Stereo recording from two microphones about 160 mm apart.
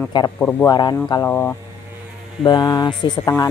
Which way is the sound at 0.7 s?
25° left (ahead or behind).